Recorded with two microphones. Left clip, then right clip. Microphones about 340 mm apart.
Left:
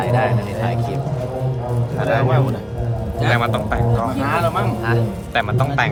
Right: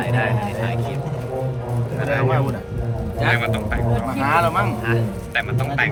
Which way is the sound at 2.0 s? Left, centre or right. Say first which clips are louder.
Left 2 dB; centre.